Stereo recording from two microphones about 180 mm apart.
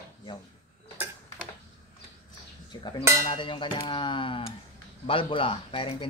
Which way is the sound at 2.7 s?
25° left (ahead or behind).